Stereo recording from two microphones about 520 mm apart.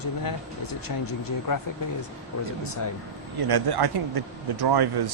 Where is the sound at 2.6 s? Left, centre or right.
Left.